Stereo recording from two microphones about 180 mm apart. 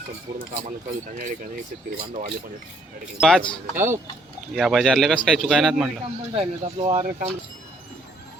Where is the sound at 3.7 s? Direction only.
15° right (ahead or behind).